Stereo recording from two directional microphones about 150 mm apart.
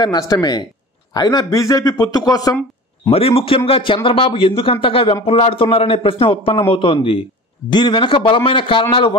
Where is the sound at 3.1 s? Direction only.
40° left (ahead or behind).